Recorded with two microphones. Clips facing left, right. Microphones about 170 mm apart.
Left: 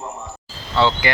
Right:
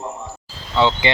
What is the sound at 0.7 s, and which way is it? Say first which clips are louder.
Speech: right 1 dB; 20° right (ahead or behind).